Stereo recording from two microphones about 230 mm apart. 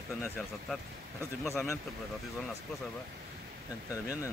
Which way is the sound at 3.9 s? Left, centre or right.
Centre.